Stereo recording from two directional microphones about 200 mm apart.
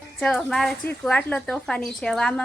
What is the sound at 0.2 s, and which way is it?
A woman's voice, 5° left (ahead or behind).